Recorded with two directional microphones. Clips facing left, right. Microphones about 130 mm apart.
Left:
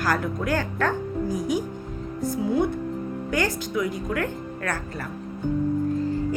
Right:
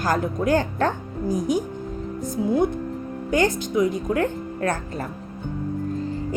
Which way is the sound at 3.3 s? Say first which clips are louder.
Right 5 dB; 20° right (ahead or behind).